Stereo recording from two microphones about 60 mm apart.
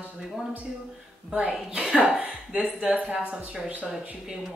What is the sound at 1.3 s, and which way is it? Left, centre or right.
Speech, centre.